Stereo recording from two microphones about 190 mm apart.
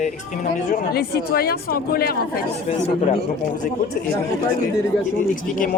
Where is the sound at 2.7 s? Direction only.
35° left (ahead or behind).